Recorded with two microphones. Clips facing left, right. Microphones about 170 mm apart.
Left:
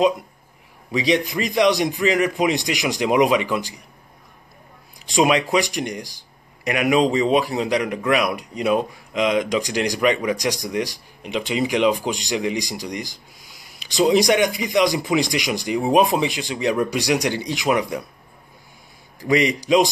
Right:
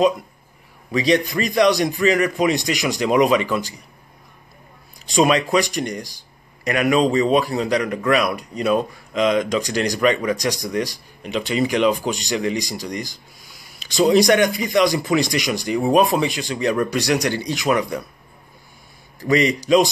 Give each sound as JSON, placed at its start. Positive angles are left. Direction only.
{"t": 0.9, "sound": "a man's voice", "side_deg": 15}
{"t": 5.1, "sound": "a man's voice", "side_deg": 15}
{"t": 19.1, "sound": "a man's voice", "side_deg": 15}